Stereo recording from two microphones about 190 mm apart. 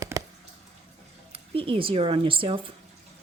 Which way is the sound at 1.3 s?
30° right (ahead or behind).